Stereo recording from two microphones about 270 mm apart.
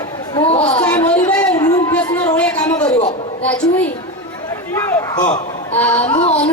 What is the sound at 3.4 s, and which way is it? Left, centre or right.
Speech, centre.